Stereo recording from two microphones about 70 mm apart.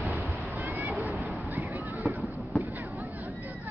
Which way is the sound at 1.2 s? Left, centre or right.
Right.